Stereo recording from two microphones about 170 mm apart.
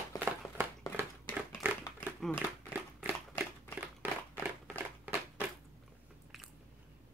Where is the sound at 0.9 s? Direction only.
10° right (ahead or behind).